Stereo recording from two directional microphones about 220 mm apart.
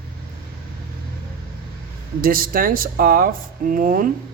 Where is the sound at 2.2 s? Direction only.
40° right (ahead or behind).